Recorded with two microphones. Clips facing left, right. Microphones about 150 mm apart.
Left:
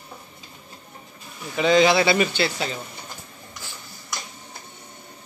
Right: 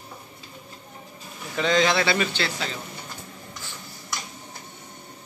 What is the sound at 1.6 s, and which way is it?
Speech, 10° left (ahead or behind).